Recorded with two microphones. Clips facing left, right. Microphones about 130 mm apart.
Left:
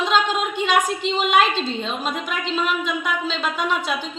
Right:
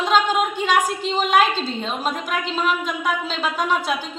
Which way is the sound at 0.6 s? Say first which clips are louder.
Even; 40° right (ahead or behind).